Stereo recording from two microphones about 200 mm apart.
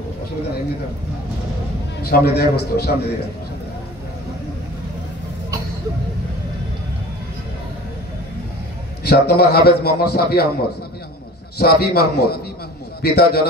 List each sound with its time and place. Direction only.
2.0 s a man's voice: 50° left (ahead or behind)
9.0 s a man's voice: 50° left (ahead or behind)
11.5 s a man's voice: 50° left (ahead or behind)